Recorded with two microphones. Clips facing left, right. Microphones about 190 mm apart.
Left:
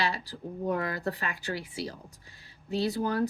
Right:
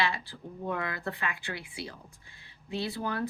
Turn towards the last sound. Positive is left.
turn(degrees=40)  # may be behind; listen again after turning